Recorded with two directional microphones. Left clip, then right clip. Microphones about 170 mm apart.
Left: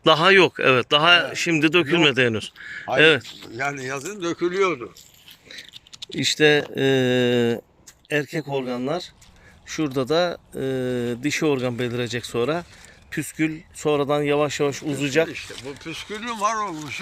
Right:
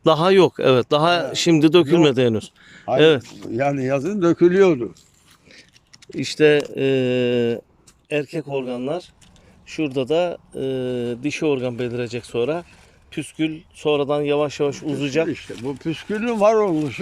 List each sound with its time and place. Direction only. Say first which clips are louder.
0.0 s speech: even; 20° right (ahead or behind)
3.5 s speech: right 6 dB; 45° right (ahead or behind)
6.1 s speech: right 2 dB; 5° right (ahead or behind)
15.3 s speech: right 5 dB; 55° right (ahead or behind)